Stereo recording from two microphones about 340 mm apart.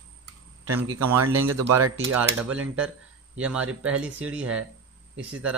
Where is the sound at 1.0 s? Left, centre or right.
Right.